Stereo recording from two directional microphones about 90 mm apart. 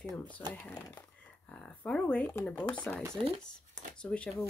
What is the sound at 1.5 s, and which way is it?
Speech, 10° left (ahead or behind).